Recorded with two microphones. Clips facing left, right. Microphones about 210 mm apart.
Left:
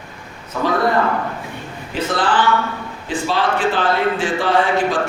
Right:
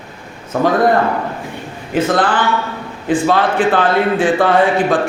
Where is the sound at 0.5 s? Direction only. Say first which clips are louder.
Right 6 dB; 50° right (ahead or behind).